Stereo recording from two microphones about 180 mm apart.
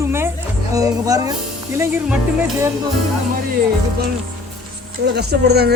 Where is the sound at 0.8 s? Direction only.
20° right (ahead or behind).